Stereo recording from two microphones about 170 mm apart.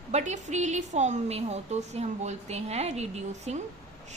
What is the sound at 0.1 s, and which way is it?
A woman's voice, 40° right (ahead or behind).